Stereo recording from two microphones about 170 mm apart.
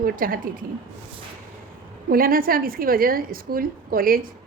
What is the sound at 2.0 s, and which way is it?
A woman's voice, 60° right (ahead or behind).